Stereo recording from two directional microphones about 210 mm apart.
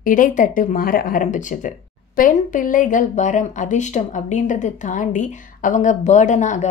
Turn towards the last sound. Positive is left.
turn(degrees=35)  # may be behind; listen again after turning